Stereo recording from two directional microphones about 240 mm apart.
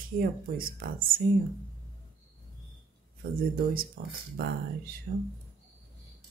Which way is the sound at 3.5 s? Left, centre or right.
Right.